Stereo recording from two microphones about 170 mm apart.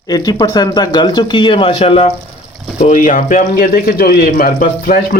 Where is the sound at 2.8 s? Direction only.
45° left (ahead or behind).